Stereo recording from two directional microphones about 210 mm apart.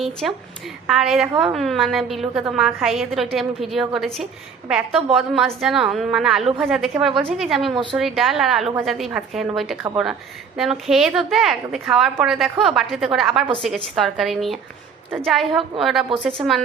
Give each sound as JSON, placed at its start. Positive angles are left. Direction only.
{"t": 0.0, "sound": "a woman's voice", "side_deg": 0}
{"t": 7.7, "sound": "a woman's voice", "side_deg": -20}
{"t": 7.9, "sound": "a woman's voice", "side_deg": 0}
{"t": 10.6, "sound": "a woman's voice", "side_deg": 0}